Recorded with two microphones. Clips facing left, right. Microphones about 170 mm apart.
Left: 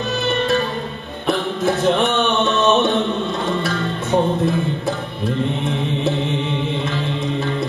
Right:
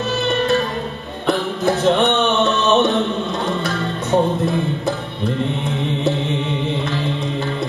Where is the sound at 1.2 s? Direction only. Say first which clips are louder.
Right 1 dB; centre (ahead or behind).